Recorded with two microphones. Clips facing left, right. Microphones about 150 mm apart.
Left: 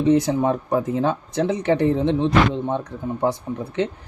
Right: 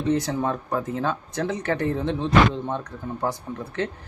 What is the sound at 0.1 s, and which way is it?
Speech, 20° left (ahead or behind).